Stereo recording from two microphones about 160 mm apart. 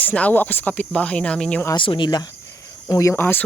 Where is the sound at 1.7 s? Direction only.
30° left (ahead or behind); by 3.4 s 10° left (ahead or behind).